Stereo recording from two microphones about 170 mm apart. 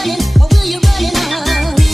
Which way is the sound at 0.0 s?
Centre (ahead or behind).